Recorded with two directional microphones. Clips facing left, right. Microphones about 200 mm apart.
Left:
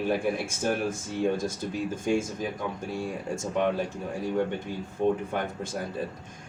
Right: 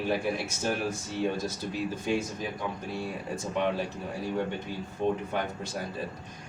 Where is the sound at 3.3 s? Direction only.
45° left (ahead or behind).